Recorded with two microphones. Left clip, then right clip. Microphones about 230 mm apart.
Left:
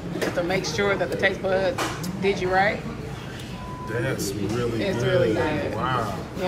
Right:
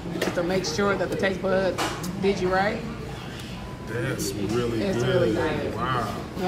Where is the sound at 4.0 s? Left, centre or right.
Centre.